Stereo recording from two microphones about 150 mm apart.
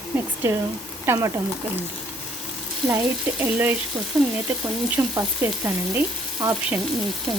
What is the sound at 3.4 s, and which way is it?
Speech, 15° right (ahead or behind).